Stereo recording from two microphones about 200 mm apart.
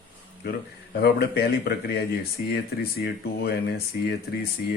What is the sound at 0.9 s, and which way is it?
Speech, 55° left (ahead or behind).